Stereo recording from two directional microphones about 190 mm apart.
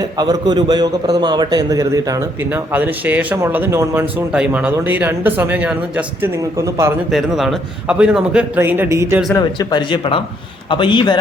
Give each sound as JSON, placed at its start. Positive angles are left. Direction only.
{"t": 0.0, "sound": "a man's voice", "side_deg": -20}
{"t": 7.1, "sound": "a man's voice", "side_deg": 0}
{"t": 9.3, "sound": "speech", "side_deg": 20}